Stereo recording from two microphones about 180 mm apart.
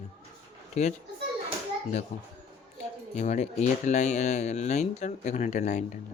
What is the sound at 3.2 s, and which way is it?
Speech, 40° left (ahead or behind).